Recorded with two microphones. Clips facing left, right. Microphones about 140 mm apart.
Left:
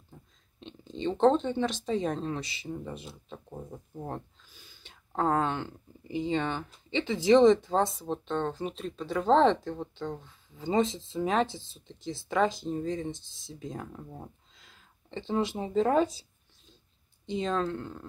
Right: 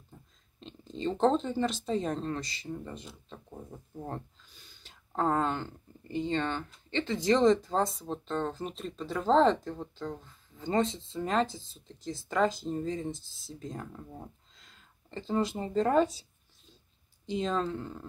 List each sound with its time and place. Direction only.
0.6 s a sound: centre (ahead or behind)
1.2 s speech: centre (ahead or behind)
17.3 s speech: centre (ahead or behind)